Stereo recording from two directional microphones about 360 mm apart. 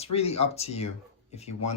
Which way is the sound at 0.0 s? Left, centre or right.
Centre.